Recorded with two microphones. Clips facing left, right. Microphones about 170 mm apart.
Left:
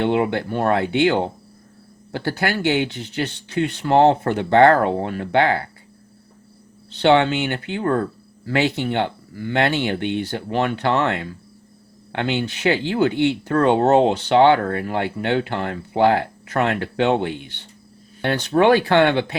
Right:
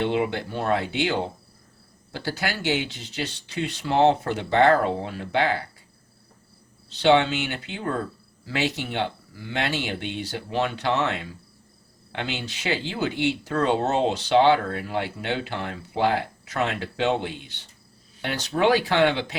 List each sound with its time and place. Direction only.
0.0 s speech: 55° left (ahead or behind)
6.9 s speech: 55° left (ahead or behind)